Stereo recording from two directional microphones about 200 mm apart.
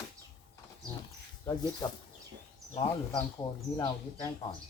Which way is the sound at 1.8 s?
20° left (ahead or behind).